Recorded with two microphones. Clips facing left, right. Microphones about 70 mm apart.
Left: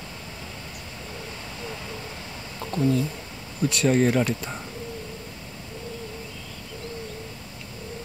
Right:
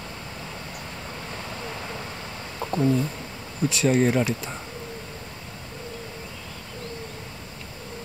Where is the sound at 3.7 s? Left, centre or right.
Centre.